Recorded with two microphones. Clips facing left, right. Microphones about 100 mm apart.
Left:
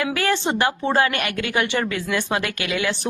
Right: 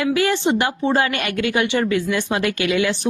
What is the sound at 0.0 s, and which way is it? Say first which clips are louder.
Speech: right 3 dB; 20° right (ahead or behind).